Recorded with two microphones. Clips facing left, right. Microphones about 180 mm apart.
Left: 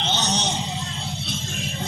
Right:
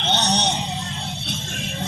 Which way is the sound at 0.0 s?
65° right (ahead or behind).